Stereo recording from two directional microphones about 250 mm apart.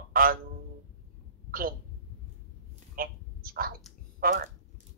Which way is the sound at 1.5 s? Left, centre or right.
Right.